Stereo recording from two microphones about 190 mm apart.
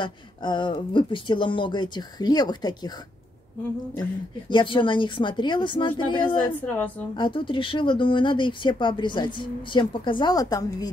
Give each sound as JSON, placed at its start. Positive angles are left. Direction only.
{"t": 0.0, "sound": "speech", "side_deg": 25}
{"t": 4.5, "sound": "speech", "side_deg": 25}
{"t": 6.6, "sound": "a woman's voice", "side_deg": 10}
{"t": 7.2, "sound": "speech", "side_deg": 25}